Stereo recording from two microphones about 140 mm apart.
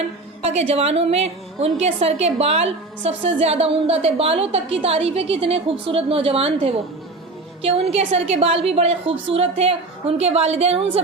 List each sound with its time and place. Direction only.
0.4 s a woman's voice: 50° right (ahead or behind)